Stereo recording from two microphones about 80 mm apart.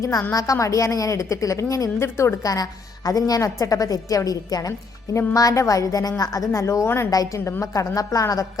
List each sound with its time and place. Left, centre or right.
0.0 s a woman's voice: left
2.5 s a woman's voice: left
7.1 s a woman's voice: left